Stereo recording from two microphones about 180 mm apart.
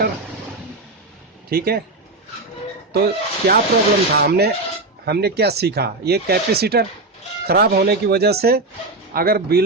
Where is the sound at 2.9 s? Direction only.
60° right (ahead or behind).